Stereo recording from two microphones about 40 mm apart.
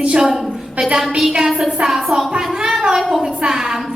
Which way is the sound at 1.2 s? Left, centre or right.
Centre.